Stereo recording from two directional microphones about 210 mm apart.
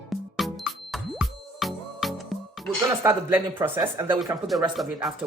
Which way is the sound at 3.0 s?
10° right (ahead or behind).